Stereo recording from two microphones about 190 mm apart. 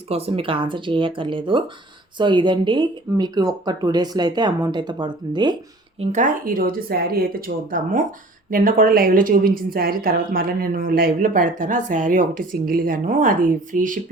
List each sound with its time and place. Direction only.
0.1 s speech: 30° right (ahead or behind)
6.0 s a woman's voice: 40° right (ahead or behind)